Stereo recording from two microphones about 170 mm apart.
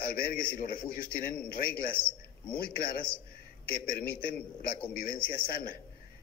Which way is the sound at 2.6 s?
60° left (ahead or behind).